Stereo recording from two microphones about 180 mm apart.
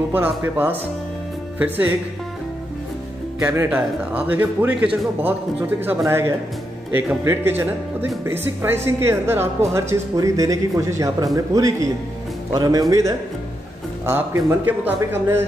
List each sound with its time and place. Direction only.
0.1 s a woman's voice: 10° right (ahead or behind)
3.3 s a woman's voice: 10° right (ahead or behind)
14.0 s a woman's voice: 15° right (ahead or behind)